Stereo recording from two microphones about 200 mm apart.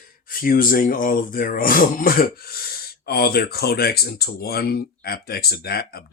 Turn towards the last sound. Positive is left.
turn(degrees=50)  # may be behind; listen again after turning